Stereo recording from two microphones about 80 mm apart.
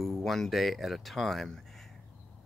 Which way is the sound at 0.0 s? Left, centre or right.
Centre.